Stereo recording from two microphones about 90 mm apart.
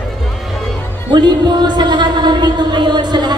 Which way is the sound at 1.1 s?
55° right (ahead or behind).